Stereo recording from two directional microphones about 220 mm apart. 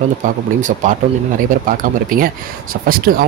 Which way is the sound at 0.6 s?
35° right (ahead or behind).